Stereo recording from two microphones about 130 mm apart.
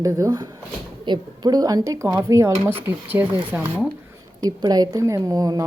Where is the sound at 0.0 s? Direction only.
25° right (ahead or behind).